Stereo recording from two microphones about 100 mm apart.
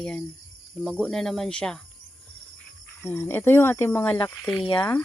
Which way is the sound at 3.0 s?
20° left (ahead or behind).